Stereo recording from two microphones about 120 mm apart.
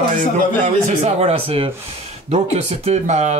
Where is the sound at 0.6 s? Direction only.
80° right; by 1.7 s 55° right (ahead or behind).